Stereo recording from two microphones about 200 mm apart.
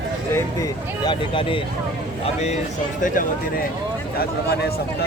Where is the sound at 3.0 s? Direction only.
45° left (ahead or behind).